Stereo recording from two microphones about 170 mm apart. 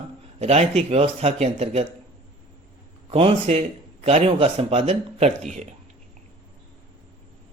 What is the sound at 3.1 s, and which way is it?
Speech, 35° right (ahead or behind).